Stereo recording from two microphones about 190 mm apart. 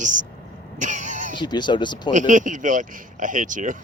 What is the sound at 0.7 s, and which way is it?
Vehicle, 40° right (ahead or behind).